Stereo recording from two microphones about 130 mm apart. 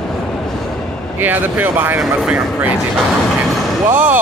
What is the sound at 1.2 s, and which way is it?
Speech, 15° right (ahead or behind).